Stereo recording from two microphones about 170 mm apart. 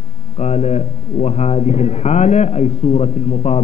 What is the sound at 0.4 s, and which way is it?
A man's voice, 40° left (ahead or behind).